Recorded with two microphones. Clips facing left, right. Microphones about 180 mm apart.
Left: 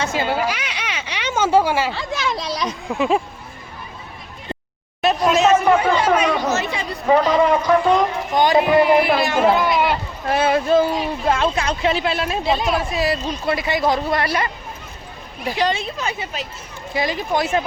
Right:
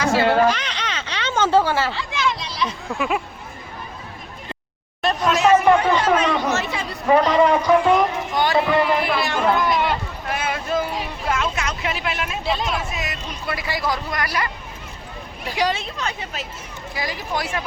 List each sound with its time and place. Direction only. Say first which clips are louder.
0.0 s a sound: right 4 dB; 15° left (ahead or behind)
2.0 s children playing: left 1 dB; 40° left (ahead or behind)
2.8 s speech: left 4 dB; 15° left (ahead or behind)
5.3 s hubbub: even; 20° left (ahead or behind)
5.5 s chatter: even; 5° left (ahead or behind)
7.6 s a sound: even; 5° right (ahead or behind)
8.4 s a sound: left 4 dB; 15° left (ahead or behind)
10.2 s a sound: left 9 dB; 35° left (ahead or behind)
12.5 s speech: left 3 dB; centre (ahead or behind)
12.7 s speech: left 7 dB; 35° left (ahead or behind)
15.5 s speech: left 1 dB; 10° right (ahead or behind)
15.8 s speech: left 3 dB; 5° left (ahead or behind)
16.9 s speech: left 6 dB; 25° left (ahead or behind)